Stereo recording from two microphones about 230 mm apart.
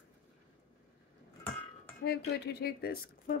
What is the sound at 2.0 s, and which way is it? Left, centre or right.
Speech, left.